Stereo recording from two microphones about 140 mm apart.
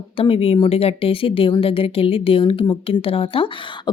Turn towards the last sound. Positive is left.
turn(degrees=40)  # may be behind; listen again after turning